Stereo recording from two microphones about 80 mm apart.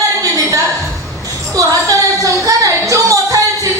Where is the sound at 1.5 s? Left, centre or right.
Right.